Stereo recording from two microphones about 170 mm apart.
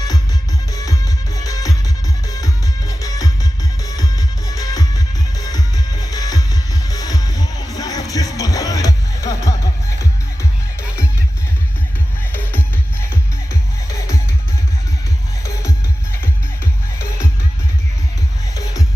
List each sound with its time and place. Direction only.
0.7 s music: 20° left (ahead or behind)
12.3 s music: 10° left (ahead or behind)
18.5 s music: 20° left (ahead or behind)